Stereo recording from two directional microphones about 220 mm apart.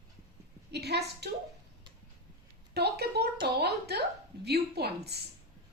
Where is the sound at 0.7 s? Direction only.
50° right (ahead or behind).